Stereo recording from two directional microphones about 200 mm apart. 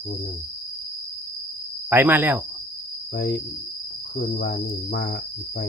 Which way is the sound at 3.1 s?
55° left (ahead or behind).